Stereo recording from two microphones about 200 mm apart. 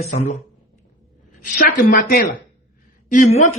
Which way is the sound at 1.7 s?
45° left (ahead or behind).